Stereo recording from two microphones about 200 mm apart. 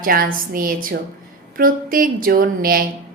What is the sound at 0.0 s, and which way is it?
A woman's voice, 45° right (ahead or behind).